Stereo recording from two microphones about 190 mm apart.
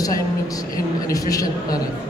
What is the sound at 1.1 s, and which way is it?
Speech, 20° left (ahead or behind).